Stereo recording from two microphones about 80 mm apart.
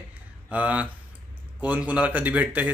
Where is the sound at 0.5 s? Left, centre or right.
Centre.